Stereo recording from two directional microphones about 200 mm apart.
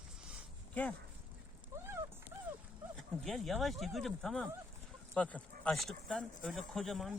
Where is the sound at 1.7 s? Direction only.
15° right (ahead or behind).